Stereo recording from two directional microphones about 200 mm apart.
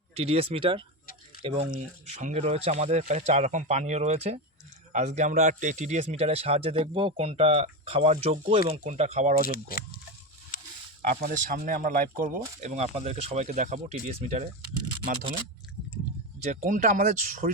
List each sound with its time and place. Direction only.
0.1 s speech: 30° right (ahead or behind)
9.4 s speech: 45° left (ahead or behind)
11.1 s speech: 45° right (ahead or behind)
16.5 s speech: 40° right (ahead or behind)